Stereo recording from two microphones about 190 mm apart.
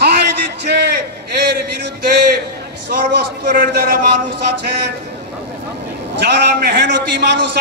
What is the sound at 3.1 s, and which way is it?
Speech, 50° right (ahead or behind).